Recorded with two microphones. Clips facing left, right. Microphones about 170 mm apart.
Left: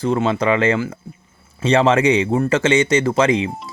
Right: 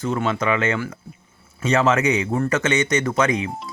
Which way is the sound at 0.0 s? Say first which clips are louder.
Left 4 dB; 30° left (ahead or behind).